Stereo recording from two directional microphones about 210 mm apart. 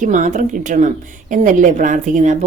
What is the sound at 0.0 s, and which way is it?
A woman's voice, 35° right (ahead or behind).